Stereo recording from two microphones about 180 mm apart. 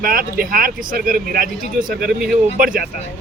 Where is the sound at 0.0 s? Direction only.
50° right (ahead or behind).